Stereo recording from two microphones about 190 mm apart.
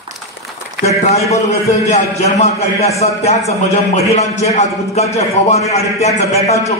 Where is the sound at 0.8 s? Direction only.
70° right (ahead or behind).